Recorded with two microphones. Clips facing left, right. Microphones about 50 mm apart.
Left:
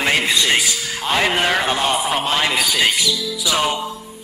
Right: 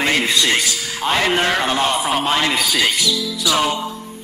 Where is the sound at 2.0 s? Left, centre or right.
Centre.